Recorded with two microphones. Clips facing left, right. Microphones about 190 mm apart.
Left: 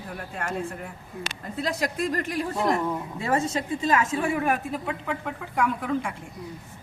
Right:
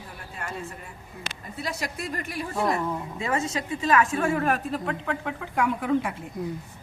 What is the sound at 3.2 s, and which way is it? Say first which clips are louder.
Speech: left 2 dB; 35° left (ahead or behind).